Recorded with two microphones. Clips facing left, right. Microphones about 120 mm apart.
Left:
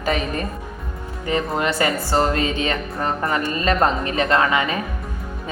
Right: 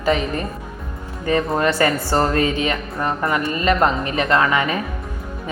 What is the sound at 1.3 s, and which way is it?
A woman's voice, 20° left (ahead or behind).